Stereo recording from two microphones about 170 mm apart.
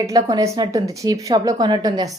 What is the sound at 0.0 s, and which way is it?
A woman's voice, 20° right (ahead or behind).